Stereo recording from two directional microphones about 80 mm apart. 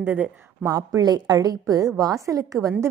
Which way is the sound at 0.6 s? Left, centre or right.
Right.